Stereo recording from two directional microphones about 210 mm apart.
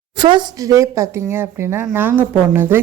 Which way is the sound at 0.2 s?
20° right (ahead or behind).